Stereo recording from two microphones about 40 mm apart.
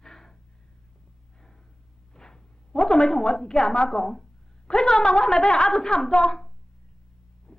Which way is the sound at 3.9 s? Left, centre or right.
Centre.